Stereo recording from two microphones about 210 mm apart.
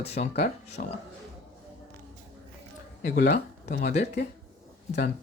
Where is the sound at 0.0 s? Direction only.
30° left (ahead or behind).